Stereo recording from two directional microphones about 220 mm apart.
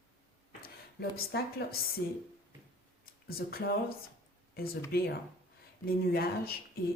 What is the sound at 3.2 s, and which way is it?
Speech, 45° left (ahead or behind).